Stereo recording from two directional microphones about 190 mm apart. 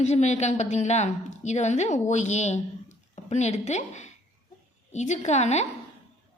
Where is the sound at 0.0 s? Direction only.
35° left (ahead or behind).